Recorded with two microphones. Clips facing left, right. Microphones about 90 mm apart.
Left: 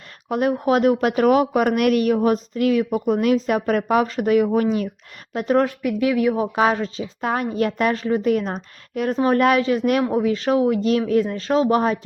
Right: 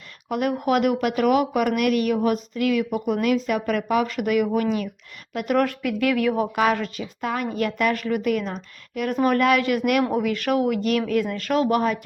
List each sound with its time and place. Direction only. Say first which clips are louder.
0.3 s speech: left 3 dB; 35° left (ahead or behind)
6.2 s speech: left 2 dB; 15° left (ahead or behind)
6.6 s speech: left 2 dB; 25° left (ahead or behind)
7.2 s speech: left 3 dB; 35° left (ahead or behind)
9.6 s speech: left 2 dB; 25° left (ahead or behind)